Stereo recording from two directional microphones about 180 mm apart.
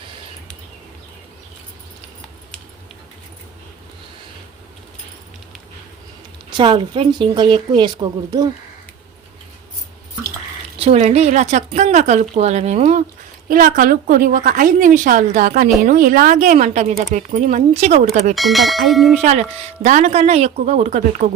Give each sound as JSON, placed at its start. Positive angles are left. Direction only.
{"t": 6.5, "sound": "speech", "side_deg": -25}
{"t": 10.8, "sound": "a woman's voice", "side_deg": -35}
{"t": 13.5, "sound": "a woman's voice", "side_deg": -50}
{"t": 18.3, "sound": "bell", "side_deg": 0}
{"t": 19.2, "sound": "a woman's voice", "side_deg": -40}